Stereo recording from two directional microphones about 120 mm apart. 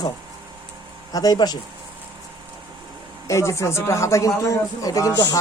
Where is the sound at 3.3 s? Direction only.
25° left (ahead or behind).